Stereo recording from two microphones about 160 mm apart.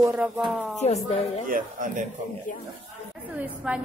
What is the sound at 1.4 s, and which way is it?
Speech, 55° right (ahead or behind).